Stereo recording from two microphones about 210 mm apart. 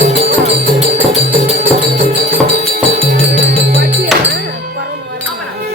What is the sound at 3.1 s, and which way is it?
Music, 50° right (ahead or behind).